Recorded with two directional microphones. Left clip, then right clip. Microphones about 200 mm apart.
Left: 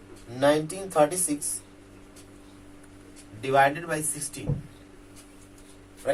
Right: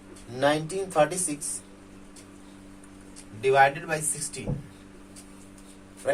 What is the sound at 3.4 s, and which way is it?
Speech, 15° right (ahead or behind).